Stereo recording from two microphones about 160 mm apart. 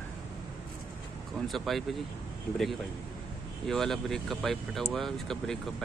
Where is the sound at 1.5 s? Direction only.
Centre (ahead or behind).